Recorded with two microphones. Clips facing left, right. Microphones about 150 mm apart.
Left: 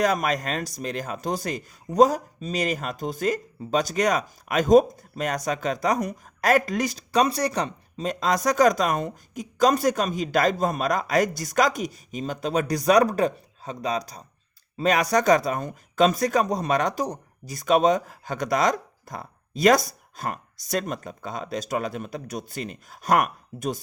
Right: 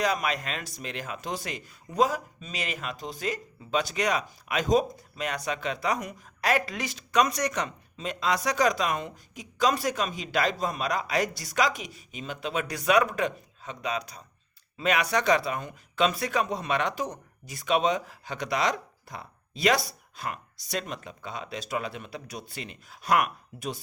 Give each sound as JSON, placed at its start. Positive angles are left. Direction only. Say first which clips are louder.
{"t": 0.0, "sound": "speech", "louder": "left 5 dB", "side_deg": 45}